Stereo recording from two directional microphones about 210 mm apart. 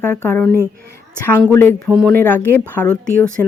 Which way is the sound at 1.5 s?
10° left (ahead or behind).